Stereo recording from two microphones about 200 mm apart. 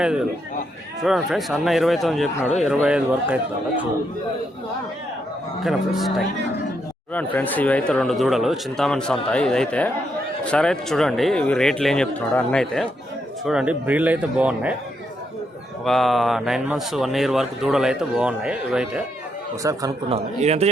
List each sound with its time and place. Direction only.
0.0 s speech: 5° right (ahead or behind)
5.6 s speech: centre (ahead or behind)
15.8 s speech: centre (ahead or behind)
19.6 s speech: 15° right (ahead or behind)
20.1 s a man's voice: 30° right (ahead or behind)